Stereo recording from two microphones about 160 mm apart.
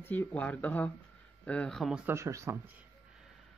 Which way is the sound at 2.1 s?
20° right (ahead or behind).